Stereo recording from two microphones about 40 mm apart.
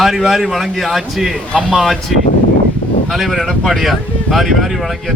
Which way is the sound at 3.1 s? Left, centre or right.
Centre.